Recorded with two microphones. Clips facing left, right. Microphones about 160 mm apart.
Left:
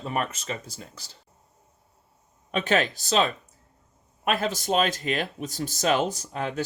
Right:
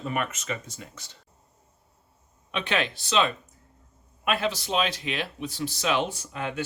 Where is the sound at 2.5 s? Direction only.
45° left (ahead or behind).